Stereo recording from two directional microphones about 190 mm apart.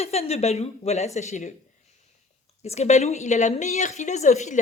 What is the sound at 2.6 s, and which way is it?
A woman's voice, 35° left (ahead or behind).